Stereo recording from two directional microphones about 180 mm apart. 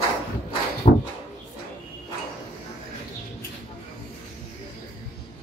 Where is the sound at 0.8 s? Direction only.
40° left (ahead or behind).